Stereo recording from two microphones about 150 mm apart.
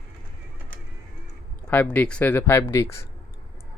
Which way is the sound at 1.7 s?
10° left (ahead or behind).